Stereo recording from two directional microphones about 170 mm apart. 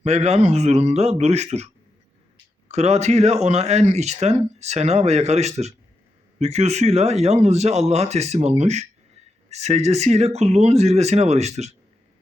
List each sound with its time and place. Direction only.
0.0 s speech: 40° right (ahead or behind)